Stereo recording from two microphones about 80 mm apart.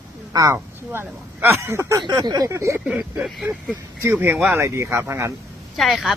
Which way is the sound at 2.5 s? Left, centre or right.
Right.